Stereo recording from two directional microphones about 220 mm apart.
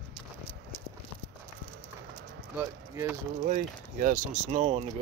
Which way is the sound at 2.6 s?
10° right (ahead or behind).